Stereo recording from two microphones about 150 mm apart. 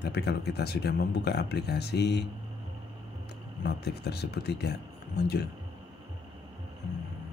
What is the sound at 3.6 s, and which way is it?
Speech, 90° left.